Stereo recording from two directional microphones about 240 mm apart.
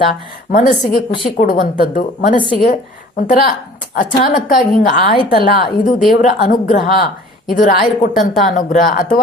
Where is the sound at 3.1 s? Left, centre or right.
Left.